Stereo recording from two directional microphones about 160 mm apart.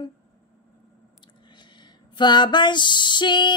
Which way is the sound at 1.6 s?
30° left (ahead or behind).